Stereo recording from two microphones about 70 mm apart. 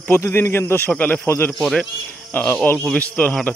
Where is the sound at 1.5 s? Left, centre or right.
Centre.